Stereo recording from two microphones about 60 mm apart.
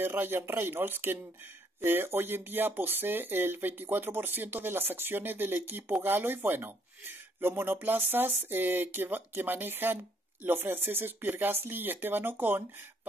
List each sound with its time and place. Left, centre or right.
0.0 s speech: right